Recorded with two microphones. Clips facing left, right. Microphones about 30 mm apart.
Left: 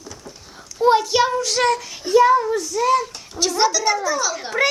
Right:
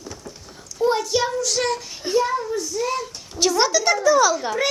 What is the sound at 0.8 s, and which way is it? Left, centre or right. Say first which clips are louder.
Speech: left 4 dB; left.